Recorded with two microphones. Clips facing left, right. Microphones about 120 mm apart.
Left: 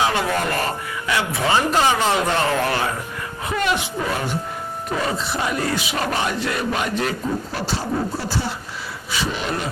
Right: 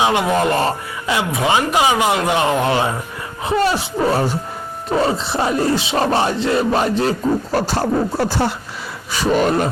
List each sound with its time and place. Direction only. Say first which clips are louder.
0.0 s speech: right 5 dB; 20° right (ahead or behind)
3.4 s music: right 5 dB; 30° right (ahead or behind)
7.5 s speech: right 7 dB; 60° right (ahead or behind)
9.1 s speech: right 9 dB; 45° right (ahead or behind)